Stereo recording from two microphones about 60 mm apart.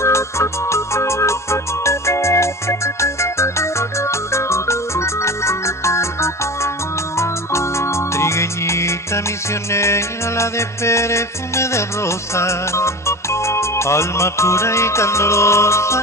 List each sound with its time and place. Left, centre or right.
0.0 s music: left